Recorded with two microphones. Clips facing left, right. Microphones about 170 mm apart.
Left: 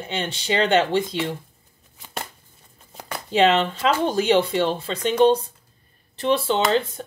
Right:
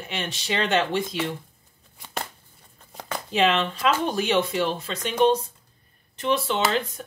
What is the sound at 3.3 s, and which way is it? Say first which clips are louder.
Speech: left 4 dB; 25° left (ahead or behind).